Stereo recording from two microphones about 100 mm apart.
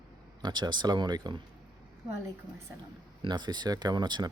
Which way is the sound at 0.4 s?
45° right (ahead or behind).